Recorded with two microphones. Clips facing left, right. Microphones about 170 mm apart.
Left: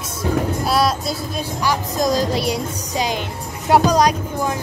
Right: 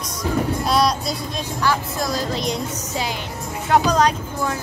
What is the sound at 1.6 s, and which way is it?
A child's voice, 15° left (ahead or behind).